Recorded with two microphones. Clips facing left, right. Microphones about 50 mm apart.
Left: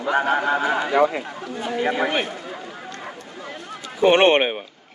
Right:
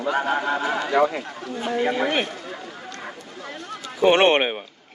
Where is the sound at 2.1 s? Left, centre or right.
Centre.